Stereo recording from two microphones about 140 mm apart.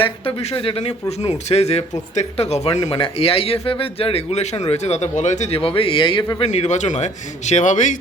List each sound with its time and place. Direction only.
0.0 s speech: 40° left (ahead or behind)
6.4 s a man's voice: 50° left (ahead or behind)